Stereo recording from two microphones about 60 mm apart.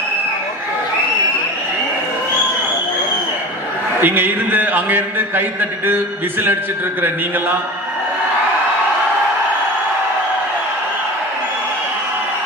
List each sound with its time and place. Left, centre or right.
4.0 s a man's voice: right
7.0 s a man's voice: right